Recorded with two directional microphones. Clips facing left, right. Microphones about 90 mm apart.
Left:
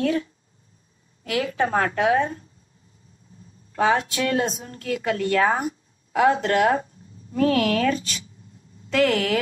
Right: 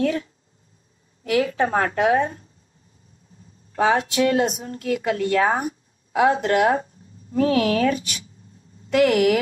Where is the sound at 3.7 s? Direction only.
25° right (ahead or behind).